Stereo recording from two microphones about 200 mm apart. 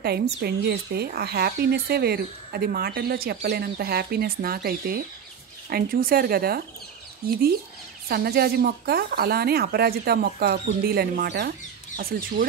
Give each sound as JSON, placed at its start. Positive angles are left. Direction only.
{"t": 0.0, "sound": "speech", "side_deg": -55}